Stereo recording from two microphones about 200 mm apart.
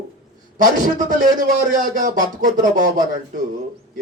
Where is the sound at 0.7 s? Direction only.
40° right (ahead or behind).